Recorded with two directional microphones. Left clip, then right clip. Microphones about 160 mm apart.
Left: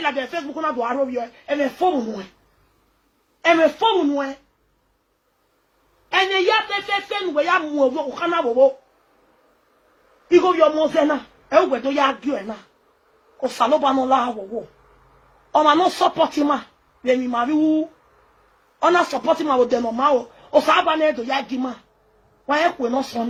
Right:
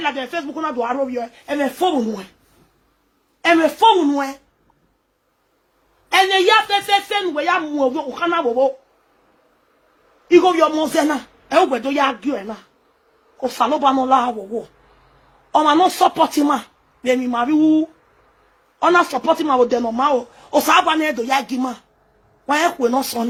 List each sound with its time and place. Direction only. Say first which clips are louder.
0.0 s a man's voice: right 1 dB; 35° right (ahead or behind)
1.2 s a man's voice: even; 40° right (ahead or behind)
3.4 s a man's voice: right 3 dB; 35° right (ahead or behind)
6.7 s a man's voice: right 6 dB; 30° right (ahead or behind)
10.2 s a man's voice: right 2 dB; 40° right (ahead or behind)
15.5 s a man's voice: right 2 dB; 35° right (ahead or behind)